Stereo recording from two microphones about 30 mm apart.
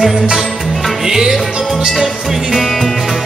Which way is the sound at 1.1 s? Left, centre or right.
Centre.